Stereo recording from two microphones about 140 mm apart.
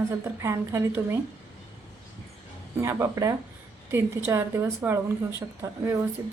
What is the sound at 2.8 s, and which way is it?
A woman's voice, 20° right (ahead or behind).